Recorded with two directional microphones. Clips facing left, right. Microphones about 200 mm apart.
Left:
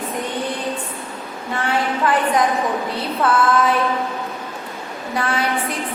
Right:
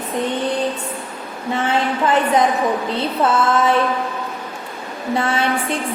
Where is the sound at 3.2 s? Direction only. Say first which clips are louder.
Even; 25° right (ahead or behind).